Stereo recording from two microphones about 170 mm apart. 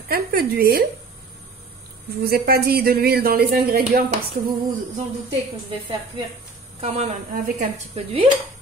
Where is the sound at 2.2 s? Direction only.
65° right (ahead or behind).